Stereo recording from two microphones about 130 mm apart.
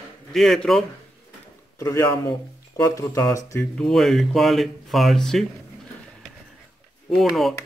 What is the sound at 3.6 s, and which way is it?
Speech, 5° left (ahead or behind).